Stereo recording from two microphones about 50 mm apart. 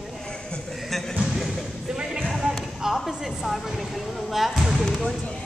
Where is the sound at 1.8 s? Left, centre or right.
Centre.